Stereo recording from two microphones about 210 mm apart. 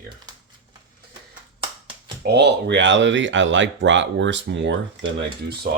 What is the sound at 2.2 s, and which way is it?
Speech, 50° right (ahead or behind).